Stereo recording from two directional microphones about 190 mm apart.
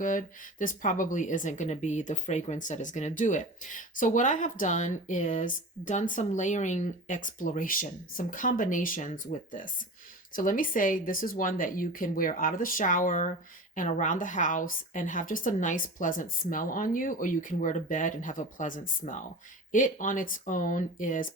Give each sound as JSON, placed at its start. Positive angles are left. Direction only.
{"t": 0.0, "sound": "a woman's voice", "side_deg": 45}